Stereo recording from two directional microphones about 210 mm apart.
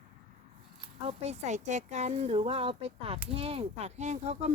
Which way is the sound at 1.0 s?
30° right (ahead or behind).